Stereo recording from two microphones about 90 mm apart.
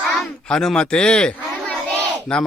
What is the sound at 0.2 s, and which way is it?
A man's voice, 5° left (ahead or behind).